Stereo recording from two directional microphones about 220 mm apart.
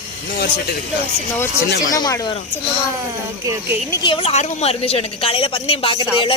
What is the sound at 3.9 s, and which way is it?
A woman's voice, 20° left (ahead or behind).